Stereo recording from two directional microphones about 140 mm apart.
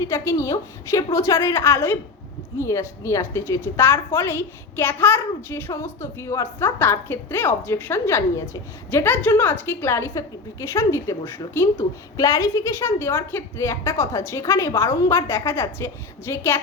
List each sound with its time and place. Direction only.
0.0 s a woman's voice: 20° left (ahead or behind)